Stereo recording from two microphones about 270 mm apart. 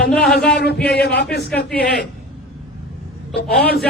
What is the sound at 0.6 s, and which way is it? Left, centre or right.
A man's voice, left.